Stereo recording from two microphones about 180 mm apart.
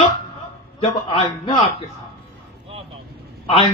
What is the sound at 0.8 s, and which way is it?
Speech, 30° left (ahead or behind).